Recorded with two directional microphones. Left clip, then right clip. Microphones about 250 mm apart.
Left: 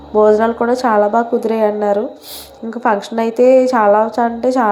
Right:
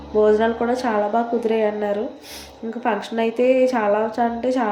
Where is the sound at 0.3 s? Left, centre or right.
Centre.